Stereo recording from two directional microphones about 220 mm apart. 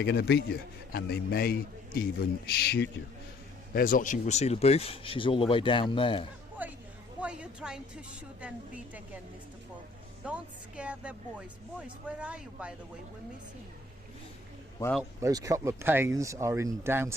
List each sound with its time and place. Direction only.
0.0 s a man's voice: 50° left (ahead or behind); by 6.2 s 25° left (ahead or behind)
6.6 s a sound: 5° right (ahead or behind)
7.2 s a woman's voice: 5° right (ahead or behind)
10.2 s speech: 5° right (ahead or behind)
15.2 s speech: 15° right (ahead or behind)